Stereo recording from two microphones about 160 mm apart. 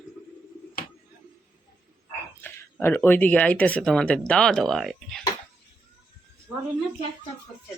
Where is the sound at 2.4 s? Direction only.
15° left (ahead or behind).